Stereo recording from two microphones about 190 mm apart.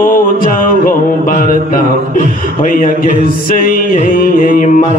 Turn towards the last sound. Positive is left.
turn(degrees=45)  # may be behind; listen again after turning